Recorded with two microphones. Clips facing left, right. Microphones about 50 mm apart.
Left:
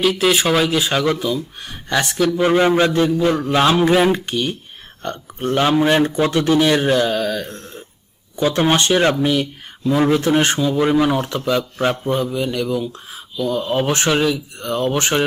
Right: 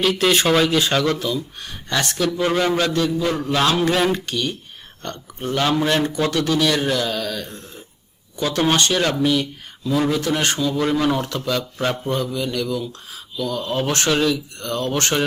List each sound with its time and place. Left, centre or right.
0.0 s speech: centre
2.4 s speech: left